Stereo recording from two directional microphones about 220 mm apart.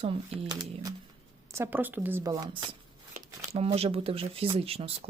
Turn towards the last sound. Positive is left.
turn(degrees=-25)  # may be behind; listen again after turning